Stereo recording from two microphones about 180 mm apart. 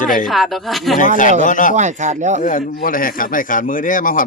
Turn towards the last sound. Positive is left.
turn(degrees=50)  # may be behind; listen again after turning